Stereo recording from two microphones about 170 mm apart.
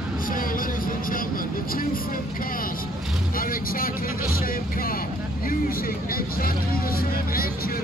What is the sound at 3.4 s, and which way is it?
Vehicle, 60° left (ahead or behind).